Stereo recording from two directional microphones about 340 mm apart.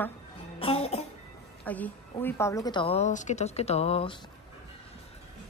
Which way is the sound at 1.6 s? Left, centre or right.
Centre.